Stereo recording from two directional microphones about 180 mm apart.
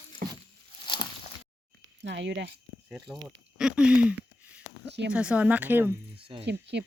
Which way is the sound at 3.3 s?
5° right (ahead or behind).